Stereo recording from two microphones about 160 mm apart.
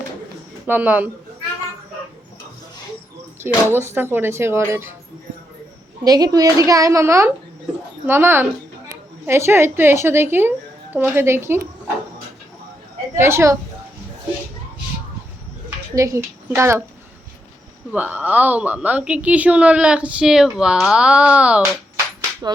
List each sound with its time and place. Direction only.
0.7 s a woman's voice: 10° right (ahead or behind)
3.4 s a woman's voice: 15° right (ahead or behind)
6.1 s a woman's voice: 25° right (ahead or behind)
13.1 s a woman's voice: 15° right (ahead or behind)
16.0 s a woman's voice: 20° right (ahead or behind)
17.9 s a woman's voice: 10° right (ahead or behind)